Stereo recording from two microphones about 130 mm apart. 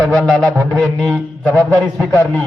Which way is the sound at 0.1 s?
5° left (ahead or behind).